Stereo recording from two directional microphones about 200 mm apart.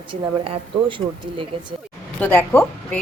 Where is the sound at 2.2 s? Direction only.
10° left (ahead or behind).